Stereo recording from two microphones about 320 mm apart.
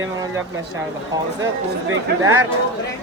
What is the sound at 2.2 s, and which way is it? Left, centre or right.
Speech, right.